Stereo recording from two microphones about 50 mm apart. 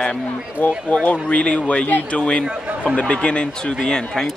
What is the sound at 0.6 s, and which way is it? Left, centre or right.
Speech, left.